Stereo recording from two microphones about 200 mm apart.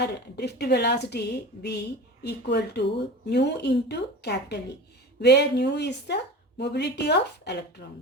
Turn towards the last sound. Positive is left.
turn(degrees=55)  # may be behind; listen again after turning